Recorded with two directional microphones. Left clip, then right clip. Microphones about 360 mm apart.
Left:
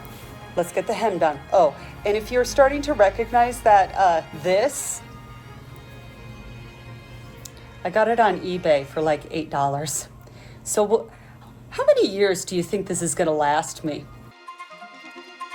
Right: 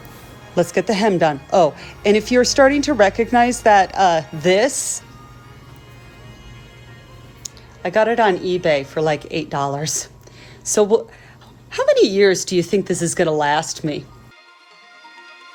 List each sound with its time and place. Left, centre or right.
0.5 s speech: right
7.4 s speech: right